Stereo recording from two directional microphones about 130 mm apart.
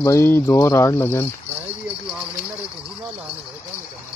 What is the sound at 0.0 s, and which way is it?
Speech, 20° left (ahead or behind).